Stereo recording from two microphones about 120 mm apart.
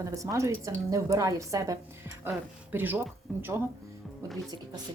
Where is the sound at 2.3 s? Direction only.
15° right (ahead or behind).